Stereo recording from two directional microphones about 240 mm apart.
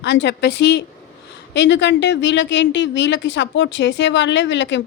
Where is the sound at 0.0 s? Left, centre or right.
Left.